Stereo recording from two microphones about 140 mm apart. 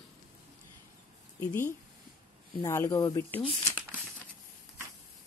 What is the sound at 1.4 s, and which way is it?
Speech, 15° left (ahead or behind).